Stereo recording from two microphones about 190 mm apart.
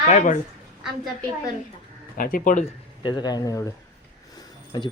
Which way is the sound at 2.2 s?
50° left (ahead or behind).